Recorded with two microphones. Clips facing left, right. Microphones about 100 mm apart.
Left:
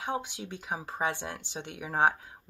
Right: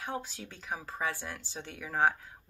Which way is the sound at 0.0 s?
20° left (ahead or behind).